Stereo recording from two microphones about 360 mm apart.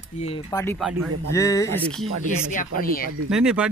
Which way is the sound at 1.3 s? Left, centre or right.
Centre.